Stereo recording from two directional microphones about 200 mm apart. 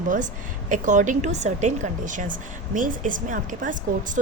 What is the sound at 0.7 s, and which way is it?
Speech, 40° right (ahead or behind).